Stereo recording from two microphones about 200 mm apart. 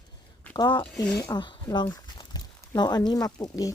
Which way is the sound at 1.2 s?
20° left (ahead or behind).